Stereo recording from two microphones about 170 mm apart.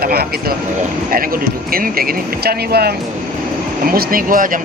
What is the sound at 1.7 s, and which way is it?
Speech, 60° right (ahead or behind).